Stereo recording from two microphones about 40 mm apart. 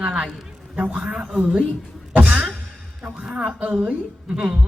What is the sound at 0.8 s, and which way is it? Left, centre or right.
Speech, right.